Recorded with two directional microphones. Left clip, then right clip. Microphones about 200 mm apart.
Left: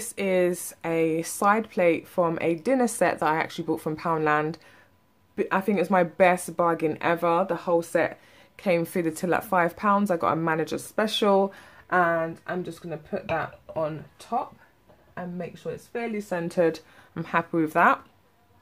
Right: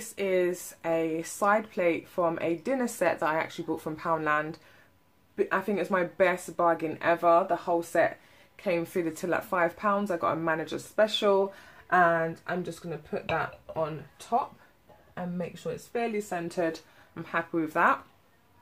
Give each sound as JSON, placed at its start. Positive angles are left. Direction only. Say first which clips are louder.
{"t": 0.0, "sound": "speech", "louder": "left 3 dB", "side_deg": 45}
{"t": 15.1, "sound": "speech", "louder": "left 1 dB", "side_deg": 10}
{"t": 16.0, "sound": "speech", "louder": "left 1 dB", "side_deg": 35}